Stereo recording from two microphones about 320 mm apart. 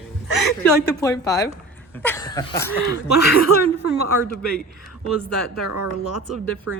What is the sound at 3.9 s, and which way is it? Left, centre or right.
Speech, right.